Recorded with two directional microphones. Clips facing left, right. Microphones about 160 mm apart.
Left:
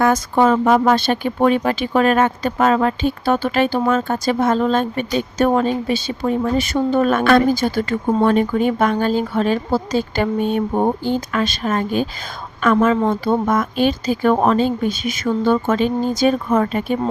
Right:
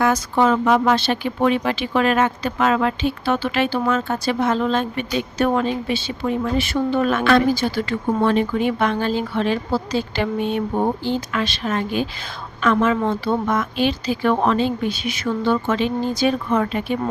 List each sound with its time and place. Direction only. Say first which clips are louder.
0.0 s speech: left 3 dB; 50° left (ahead or behind)